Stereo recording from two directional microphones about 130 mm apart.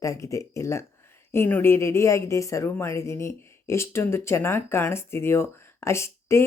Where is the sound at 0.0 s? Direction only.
25° left (ahead or behind).